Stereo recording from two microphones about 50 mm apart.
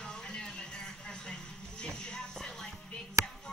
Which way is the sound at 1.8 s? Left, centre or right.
Centre.